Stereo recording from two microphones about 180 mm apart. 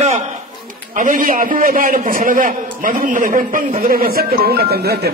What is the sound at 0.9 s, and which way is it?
A man's voice, 45° right (ahead or behind).